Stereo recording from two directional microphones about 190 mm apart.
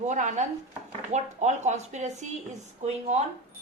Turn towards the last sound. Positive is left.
turn(degrees=-35)  # may be behind; listen again after turning